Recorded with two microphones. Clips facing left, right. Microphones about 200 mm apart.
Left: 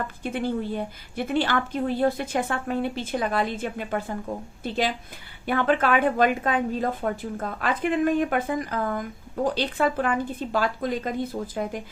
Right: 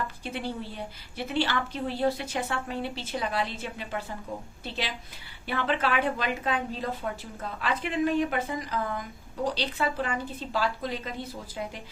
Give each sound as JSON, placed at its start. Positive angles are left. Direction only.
{"t": 0.2, "sound": "a woman's voice", "side_deg": 50}
{"t": 5.5, "sound": "a woman's voice", "side_deg": 50}